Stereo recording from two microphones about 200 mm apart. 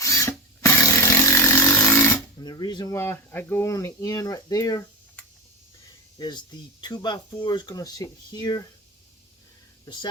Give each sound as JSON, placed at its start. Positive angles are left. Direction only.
{"t": 0.0, "sound": "tools", "side_deg": 15}
{"t": 6.1, "sound": "speech", "side_deg": 20}
{"t": 9.8, "sound": "speech", "side_deg": 25}